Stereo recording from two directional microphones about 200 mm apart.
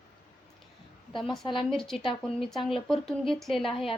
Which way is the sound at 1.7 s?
Centre (ahead or behind).